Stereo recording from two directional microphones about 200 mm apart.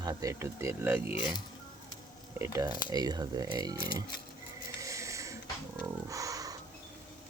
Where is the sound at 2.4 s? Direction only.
15° right (ahead or behind).